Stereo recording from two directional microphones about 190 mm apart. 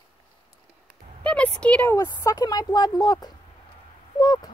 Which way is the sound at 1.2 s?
5° left (ahead or behind).